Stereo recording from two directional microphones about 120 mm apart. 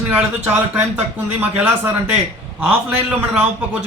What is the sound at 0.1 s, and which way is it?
A man's voice, 5° right (ahead or behind).